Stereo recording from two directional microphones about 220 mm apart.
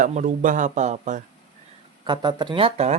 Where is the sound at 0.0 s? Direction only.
35° right (ahead or behind).